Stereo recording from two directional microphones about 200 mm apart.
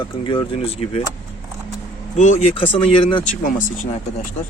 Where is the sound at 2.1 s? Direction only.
35° left (ahead or behind).